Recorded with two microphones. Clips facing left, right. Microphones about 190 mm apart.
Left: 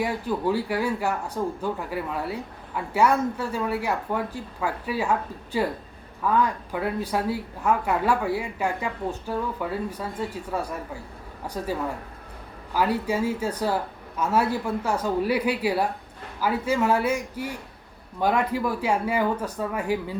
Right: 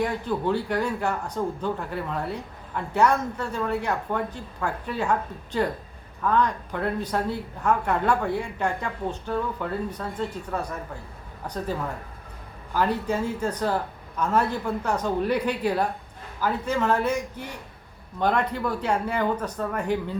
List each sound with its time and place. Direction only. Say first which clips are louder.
0.0 s speech: even; 5° left (ahead or behind)